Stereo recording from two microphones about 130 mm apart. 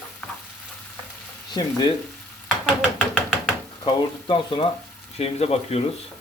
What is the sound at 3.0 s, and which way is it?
Chopping, 10° left (ahead or behind).